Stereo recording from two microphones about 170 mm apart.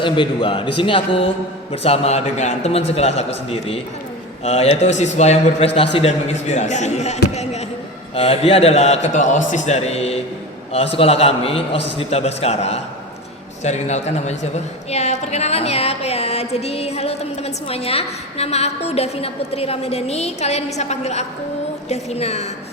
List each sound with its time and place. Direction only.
0.0 s a man's voice: 30° left (ahead or behind)